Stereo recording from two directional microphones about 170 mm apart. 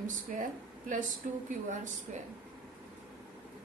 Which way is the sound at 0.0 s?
50° right (ahead or behind).